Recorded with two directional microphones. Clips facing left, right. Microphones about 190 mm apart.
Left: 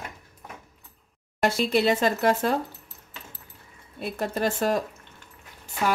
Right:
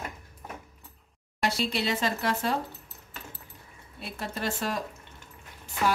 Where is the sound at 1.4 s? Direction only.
50° left (ahead or behind).